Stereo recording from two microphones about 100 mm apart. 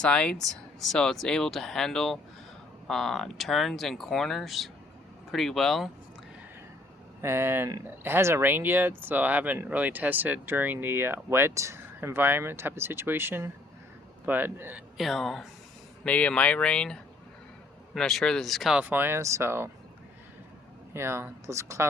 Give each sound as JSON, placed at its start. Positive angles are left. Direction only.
{"t": 0.0, "sound": "speech", "side_deg": 10}
{"t": 7.2, "sound": "speech", "side_deg": -25}
{"t": 14.9, "sound": "speech", "side_deg": 0}
{"t": 16.0, "sound": "speech", "side_deg": 15}
{"t": 18.8, "sound": "speech", "side_deg": -20}
{"t": 20.9, "sound": "speech", "side_deg": -25}